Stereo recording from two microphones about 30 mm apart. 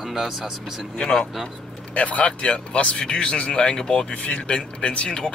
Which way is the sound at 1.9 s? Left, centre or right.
Left.